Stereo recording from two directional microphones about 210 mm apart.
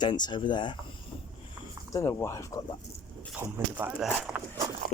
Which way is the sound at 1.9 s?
15° left (ahead or behind).